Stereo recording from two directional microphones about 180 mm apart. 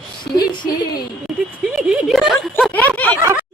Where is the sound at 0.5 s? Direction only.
25° left (ahead or behind).